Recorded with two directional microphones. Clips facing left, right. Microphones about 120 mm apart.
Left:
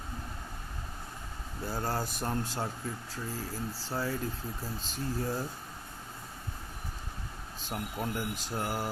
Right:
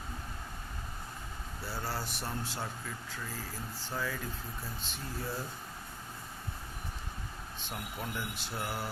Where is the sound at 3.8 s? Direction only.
35° left (ahead or behind).